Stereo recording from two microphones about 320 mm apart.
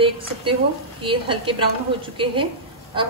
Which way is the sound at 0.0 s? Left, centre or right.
Centre.